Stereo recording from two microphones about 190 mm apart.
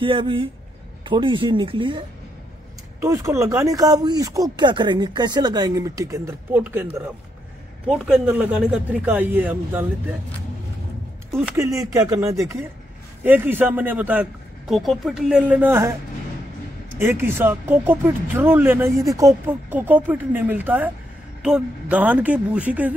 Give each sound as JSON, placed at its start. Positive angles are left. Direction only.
{"t": 0.0, "sound": "speech", "side_deg": -25}
{"t": 3.0, "sound": "speech", "side_deg": -15}
{"t": 7.9, "sound": "speech", "side_deg": -5}
{"t": 11.3, "sound": "a woman's voice", "side_deg": -15}